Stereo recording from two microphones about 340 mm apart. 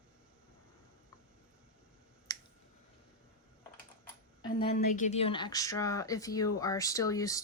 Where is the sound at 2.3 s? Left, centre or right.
Centre.